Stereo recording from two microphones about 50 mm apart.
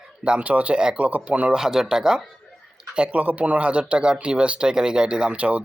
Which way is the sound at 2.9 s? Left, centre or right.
Right.